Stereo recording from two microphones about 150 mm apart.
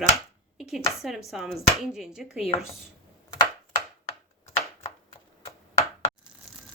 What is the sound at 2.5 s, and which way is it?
Speech, 35° left (ahead or behind).